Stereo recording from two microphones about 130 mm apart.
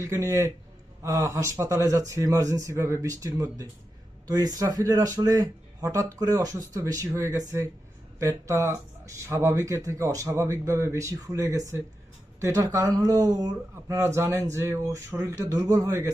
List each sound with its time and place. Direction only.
0.0 s speech: 20° right (ahead or behind)